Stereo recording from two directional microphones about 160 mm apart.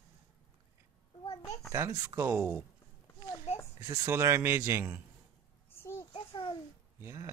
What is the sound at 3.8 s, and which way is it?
Speech, 20° right (ahead or behind).